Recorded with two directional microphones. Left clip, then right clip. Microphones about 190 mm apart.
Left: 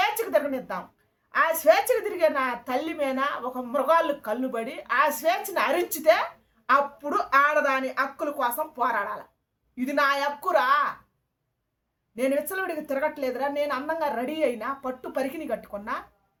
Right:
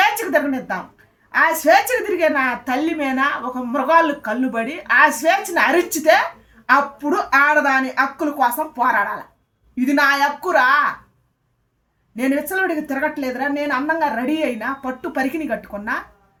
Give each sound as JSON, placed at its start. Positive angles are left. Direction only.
{"t": 1.3, "sound": "a woman's voice", "side_deg": 15}
{"t": 12.1, "sound": "a woman's voice", "side_deg": 15}